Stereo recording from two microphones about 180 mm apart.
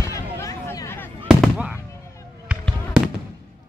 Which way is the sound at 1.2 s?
5° right (ahead or behind).